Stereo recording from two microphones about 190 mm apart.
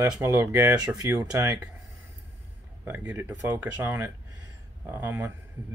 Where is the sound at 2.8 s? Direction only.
10° right (ahead or behind).